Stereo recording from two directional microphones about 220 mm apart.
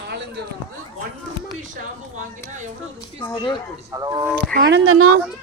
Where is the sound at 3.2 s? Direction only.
20° left (ahead or behind).